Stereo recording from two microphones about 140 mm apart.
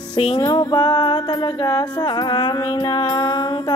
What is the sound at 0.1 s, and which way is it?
Music, 40° left (ahead or behind).